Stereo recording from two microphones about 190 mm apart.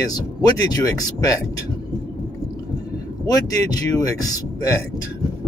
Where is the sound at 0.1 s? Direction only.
20° left (ahead or behind).